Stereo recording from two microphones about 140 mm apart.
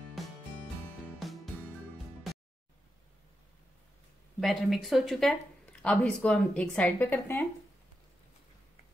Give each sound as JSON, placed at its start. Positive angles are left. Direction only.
{"t": 1.2, "sound": "music", "side_deg": 0}
{"t": 4.4, "sound": "speech", "side_deg": 0}